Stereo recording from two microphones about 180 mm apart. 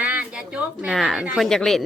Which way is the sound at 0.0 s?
5° right (ahead or behind).